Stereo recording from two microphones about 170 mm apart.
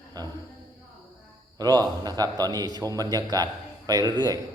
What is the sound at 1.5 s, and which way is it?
A man's voice, 20° right (ahead or behind).